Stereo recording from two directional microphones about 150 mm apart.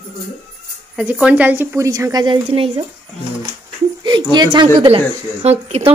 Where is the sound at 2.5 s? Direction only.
45° right (ahead or behind).